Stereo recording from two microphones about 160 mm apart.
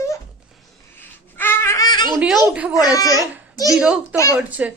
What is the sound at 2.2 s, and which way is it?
Speech, 5° right (ahead or behind).